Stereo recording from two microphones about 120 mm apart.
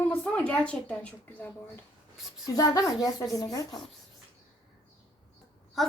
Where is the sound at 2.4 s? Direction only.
30° left (ahead or behind).